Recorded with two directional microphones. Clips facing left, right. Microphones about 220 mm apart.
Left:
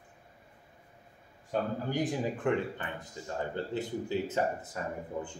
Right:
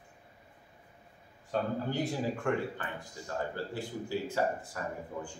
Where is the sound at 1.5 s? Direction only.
15° left (ahead or behind).